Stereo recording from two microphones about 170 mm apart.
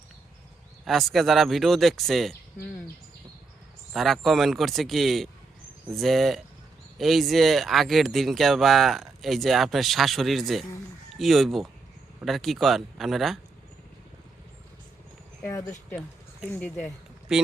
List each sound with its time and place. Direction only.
0.9 s speech: centre (ahead or behind)
3.9 s speech: centre (ahead or behind)
15.4 s speech: 15° left (ahead or behind)
17.3 s speech: 5° right (ahead or behind)